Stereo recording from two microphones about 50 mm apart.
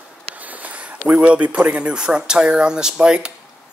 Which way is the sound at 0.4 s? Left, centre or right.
Right.